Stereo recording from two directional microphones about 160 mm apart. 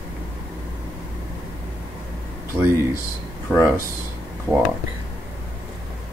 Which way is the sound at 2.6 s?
15° right (ahead or behind).